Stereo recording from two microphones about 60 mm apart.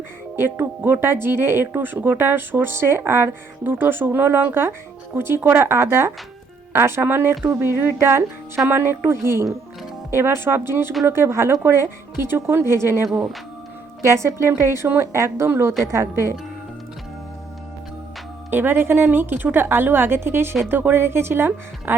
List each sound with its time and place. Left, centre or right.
0.3 s speech: right
18.5 s speech: right